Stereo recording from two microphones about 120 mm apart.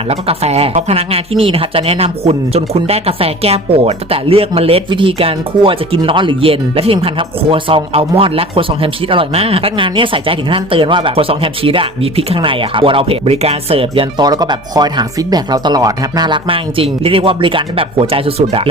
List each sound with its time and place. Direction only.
0.1 s speech: 60° right (ahead or behind)
14.2 s speech: 35° right (ahead or behind); by 18.7 s 50° right (ahead or behind)